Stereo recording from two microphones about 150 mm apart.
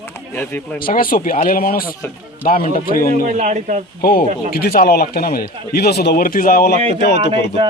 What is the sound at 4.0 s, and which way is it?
Speech, 80° left.